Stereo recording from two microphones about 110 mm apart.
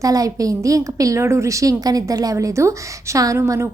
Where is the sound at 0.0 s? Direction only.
30° right (ahead or behind).